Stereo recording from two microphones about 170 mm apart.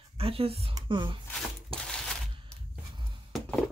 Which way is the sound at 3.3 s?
Centre (ahead or behind).